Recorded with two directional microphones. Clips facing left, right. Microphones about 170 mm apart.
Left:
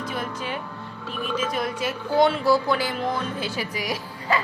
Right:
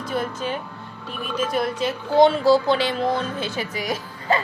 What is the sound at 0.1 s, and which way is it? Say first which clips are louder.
Speech: right 9 dB; 30° right (ahead or behind).